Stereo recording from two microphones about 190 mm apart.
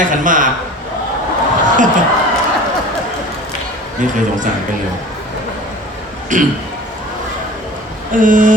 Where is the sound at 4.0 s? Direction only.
40° right (ahead or behind).